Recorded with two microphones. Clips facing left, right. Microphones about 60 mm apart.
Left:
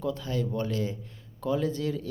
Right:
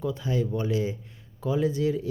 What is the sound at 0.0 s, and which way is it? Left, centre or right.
Speech, centre.